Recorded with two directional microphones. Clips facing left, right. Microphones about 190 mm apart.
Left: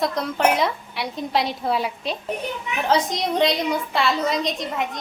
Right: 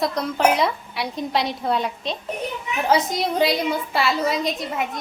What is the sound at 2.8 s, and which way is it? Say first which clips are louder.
A woman's voice: right 1 dB; 5° right (ahead or behind).